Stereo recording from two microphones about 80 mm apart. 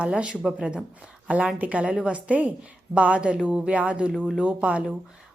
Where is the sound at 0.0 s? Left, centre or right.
Centre.